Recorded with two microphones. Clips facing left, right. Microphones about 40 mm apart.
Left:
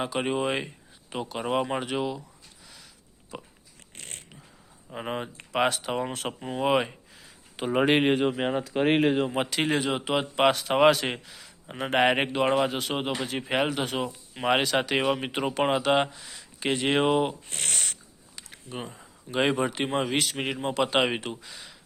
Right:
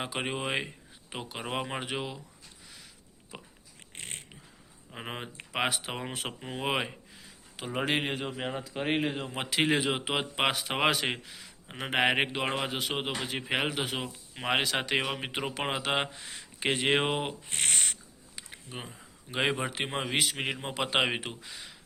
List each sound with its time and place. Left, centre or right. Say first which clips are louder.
0.0 s speech: left 6 dB; centre
3.3 s biting: left 6 dB; centre
3.9 s dog: right 1 dB; right
4.9 s speech: left 7 dB; centre
7.7 s speech: left 8 dB; left
8.1 s speech: left 9 dB; left
9.5 s speech: left 1 dB; centre
16.1 s speech: right 1 dB; right
17.5 s speech: right 1 dB; right
18.7 s speech: left 6 dB; centre